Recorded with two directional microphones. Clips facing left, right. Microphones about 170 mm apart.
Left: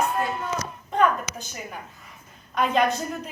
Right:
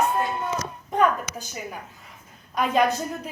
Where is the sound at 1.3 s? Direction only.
55° right (ahead or behind).